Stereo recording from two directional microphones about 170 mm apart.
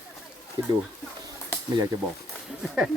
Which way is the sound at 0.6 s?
25° right (ahead or behind).